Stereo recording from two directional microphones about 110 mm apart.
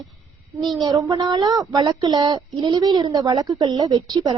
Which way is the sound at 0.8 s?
30° right (ahead or behind).